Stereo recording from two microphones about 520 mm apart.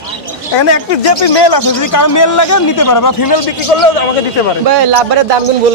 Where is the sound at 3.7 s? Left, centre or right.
Left.